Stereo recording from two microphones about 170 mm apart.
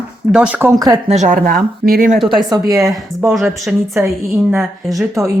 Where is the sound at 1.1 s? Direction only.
45° right (ahead or behind).